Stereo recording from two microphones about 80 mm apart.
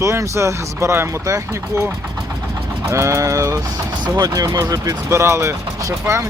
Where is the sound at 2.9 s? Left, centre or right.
Right.